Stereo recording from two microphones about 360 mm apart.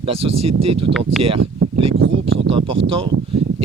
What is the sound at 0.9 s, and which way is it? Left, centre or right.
Speech, right.